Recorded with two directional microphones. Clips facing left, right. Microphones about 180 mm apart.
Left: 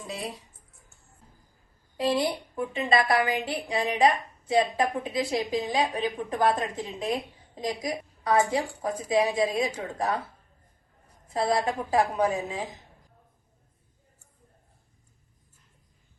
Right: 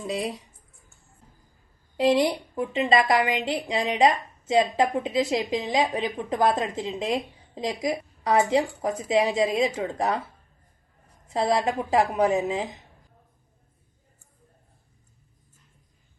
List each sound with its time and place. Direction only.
0.1 s speech: 15° right (ahead or behind)
2.6 s a woman's voice: 20° right (ahead or behind)
11.3 s a woman's voice: 20° right (ahead or behind)